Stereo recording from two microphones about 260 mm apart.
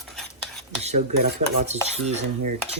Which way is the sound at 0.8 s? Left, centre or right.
Right.